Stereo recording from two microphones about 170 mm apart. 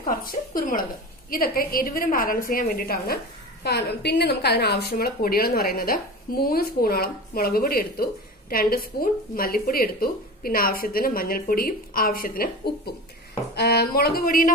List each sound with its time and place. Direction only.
0.0 s a woman's voice: 55° left (ahead or behind)
3.6 s a woman's voice: 75° left (ahead or behind)
13.6 s a woman's voice: 70° left (ahead or behind)